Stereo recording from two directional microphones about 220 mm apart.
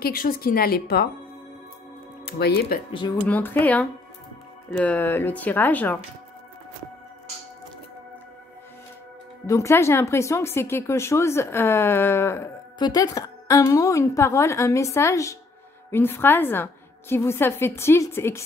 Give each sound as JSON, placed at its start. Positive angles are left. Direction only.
{"t": 0.0, "sound": "speech", "side_deg": 40}
{"t": 2.2, "sound": "speech", "side_deg": 50}
{"t": 3.3, "sound": "speech", "side_deg": 10}
{"t": 9.5, "sound": "speech", "side_deg": 10}